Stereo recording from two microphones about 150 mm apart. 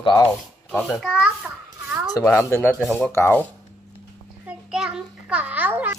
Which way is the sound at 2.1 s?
15° left (ahead or behind).